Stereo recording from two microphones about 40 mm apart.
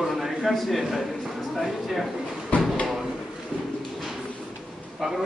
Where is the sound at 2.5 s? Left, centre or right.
Left.